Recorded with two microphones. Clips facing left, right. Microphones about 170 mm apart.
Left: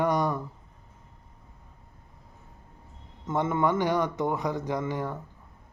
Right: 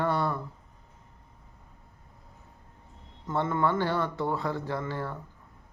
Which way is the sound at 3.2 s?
20° left (ahead or behind).